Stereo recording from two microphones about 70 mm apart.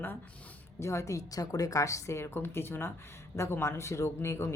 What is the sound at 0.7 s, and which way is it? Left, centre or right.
A woman's voice, left.